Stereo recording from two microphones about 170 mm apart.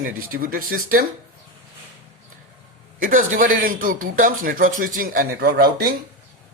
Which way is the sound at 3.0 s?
50° right (ahead or behind).